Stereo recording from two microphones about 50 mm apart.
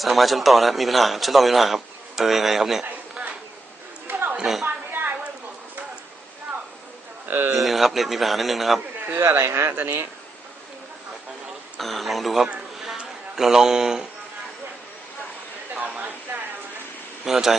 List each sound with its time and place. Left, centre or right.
0.0 s a man's voice: centre
4.0 s chatter: right
4.4 s a woman's voice: centre
4.6 s a sound: right
7.3 s speech: right
7.6 s a man's voice: centre
9.1 s speech: right
11.8 s a man's voice: centre
12.8 s a sound: centre
15.7 s a sound: right
17.2 s speech: centre